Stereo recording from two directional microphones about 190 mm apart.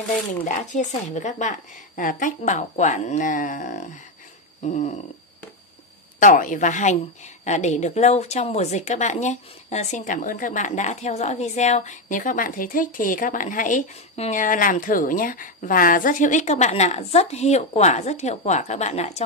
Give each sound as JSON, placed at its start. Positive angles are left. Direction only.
{"t": 0.4, "sound": "a woman's voice", "side_deg": 40}
{"t": 6.1, "sound": "a woman's voice", "side_deg": 45}